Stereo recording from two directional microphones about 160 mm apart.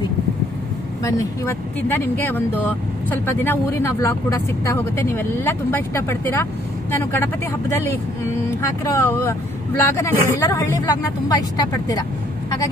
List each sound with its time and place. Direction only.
1.0 s speech: 20° left (ahead or behind)
8.5 s a woman's voice: 15° left (ahead or behind)